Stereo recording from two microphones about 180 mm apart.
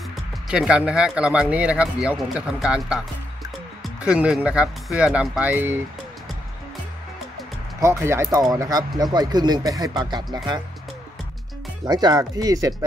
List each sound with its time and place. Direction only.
0.1 s speech: 5° right (ahead or behind)
7.8 s speech: 15° right (ahead or behind)
11.8 s speech: 25° right (ahead or behind)